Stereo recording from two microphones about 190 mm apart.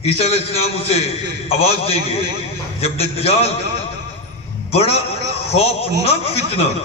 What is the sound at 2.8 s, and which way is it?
Speech, 30° left (ahead or behind).